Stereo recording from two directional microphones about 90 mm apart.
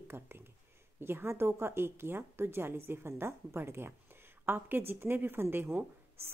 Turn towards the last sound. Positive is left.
turn(degrees=-25)  # may be behind; listen again after turning